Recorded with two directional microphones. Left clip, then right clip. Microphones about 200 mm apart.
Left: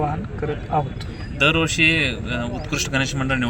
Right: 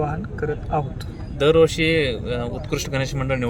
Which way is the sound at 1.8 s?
75° right (ahead or behind).